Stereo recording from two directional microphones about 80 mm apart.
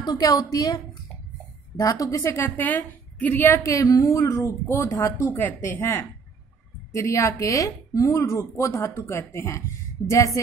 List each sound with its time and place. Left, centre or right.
0.0 s a woman's voice: left
2.4 s a woman's voice: left
3.7 s a woman's voice: left
5.2 s a woman's voice: left